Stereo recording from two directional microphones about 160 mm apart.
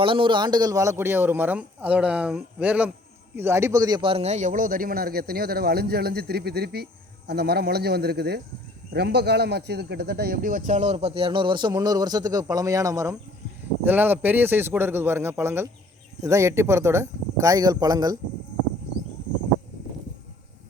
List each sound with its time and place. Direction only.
0.0 s a man's voice: 30° right (ahead or behind)